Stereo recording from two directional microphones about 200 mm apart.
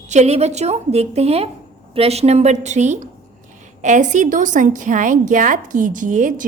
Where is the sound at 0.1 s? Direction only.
35° right (ahead or behind).